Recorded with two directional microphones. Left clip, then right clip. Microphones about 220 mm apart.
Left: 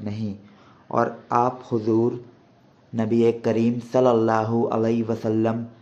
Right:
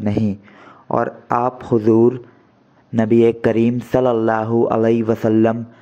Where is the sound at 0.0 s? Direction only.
35° right (ahead or behind).